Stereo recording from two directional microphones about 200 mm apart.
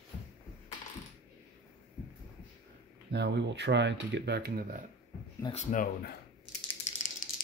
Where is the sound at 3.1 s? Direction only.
60° right (ahead or behind).